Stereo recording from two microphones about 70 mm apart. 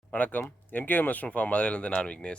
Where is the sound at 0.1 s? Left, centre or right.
Left.